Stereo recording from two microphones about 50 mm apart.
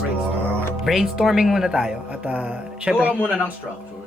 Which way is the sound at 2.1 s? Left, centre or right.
Right.